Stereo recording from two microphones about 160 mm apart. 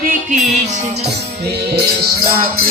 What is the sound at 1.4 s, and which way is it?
Music, 90° right.